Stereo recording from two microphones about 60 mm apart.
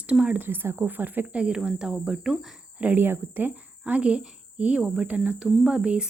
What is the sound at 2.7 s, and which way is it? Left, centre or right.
Speech, right.